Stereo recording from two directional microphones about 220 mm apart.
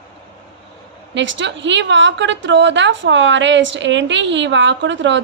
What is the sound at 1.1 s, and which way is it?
A woman's voice, 55° right (ahead or behind).